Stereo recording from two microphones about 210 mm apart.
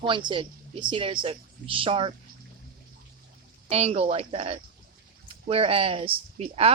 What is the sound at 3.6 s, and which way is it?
Speech, 30° right (ahead or behind).